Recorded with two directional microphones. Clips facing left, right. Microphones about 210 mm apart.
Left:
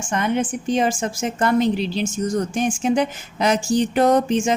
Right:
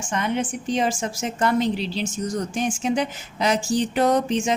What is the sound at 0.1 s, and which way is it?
A woman's voice, 50° left (ahead or behind).